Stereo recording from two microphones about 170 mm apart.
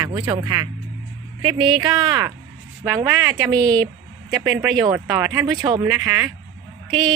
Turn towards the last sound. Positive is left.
turn(degrees=-25)  # may be behind; listen again after turning